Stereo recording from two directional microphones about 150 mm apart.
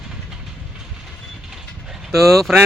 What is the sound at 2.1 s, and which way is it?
Speech, centre (ahead or behind).